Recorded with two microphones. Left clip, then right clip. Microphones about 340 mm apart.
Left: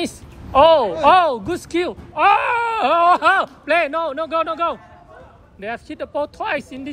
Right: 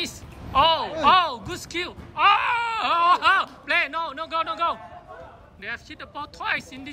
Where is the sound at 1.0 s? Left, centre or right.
Centre.